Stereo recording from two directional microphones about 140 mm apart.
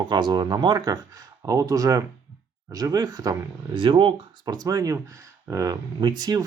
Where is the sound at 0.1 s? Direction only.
35° right (ahead or behind).